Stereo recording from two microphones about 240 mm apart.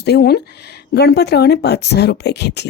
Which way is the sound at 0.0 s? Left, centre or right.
Left.